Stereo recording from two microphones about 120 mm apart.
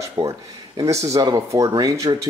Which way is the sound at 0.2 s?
25° right (ahead or behind).